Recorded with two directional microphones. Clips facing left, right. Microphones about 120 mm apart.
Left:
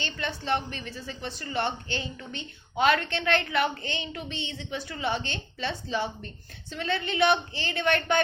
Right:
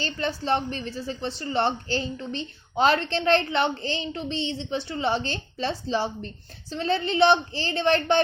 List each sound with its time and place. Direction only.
0.0 s a woman's voice: 35° right (ahead or behind)